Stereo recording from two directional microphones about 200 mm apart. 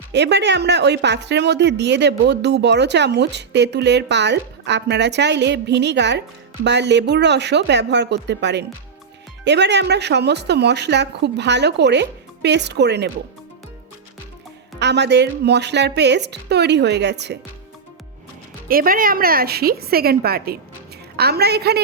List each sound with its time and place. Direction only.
0.1 s speech: 60° right (ahead or behind)
14.8 s speech: 60° right (ahead or behind)
18.7 s a woman's voice: 45° right (ahead or behind)